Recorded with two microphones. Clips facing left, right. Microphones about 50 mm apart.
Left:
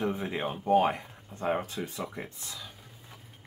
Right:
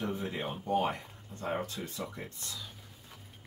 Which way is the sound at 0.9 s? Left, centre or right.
Left.